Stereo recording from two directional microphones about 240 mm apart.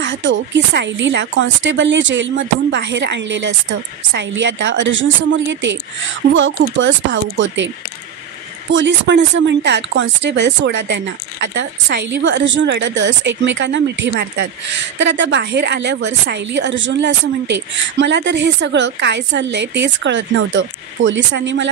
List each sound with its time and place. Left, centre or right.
0.0 s a woman's voice: right
8.7 s a woman's voice: right